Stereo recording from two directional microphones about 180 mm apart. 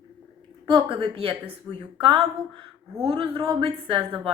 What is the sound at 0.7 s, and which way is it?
A woman's voice, 30° right (ahead or behind).